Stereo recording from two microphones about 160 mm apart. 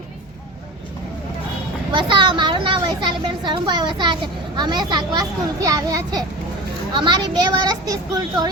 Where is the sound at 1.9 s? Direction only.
30° right (ahead or behind).